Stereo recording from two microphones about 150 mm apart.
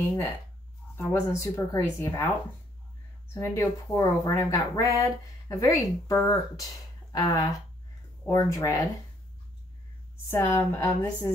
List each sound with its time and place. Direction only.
0.9 s speech: 15° left (ahead or behind)
3.3 s speech: 15° left (ahead or behind)
10.3 s speech: 15° left (ahead or behind)